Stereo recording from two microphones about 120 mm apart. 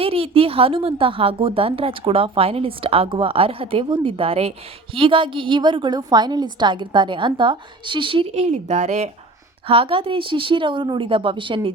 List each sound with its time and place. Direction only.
0.0 s a woman's voice: 50° right (ahead or behind); by 9.0 s 75° right (ahead or behind)
9.6 s a woman's voice: 50° right (ahead or behind)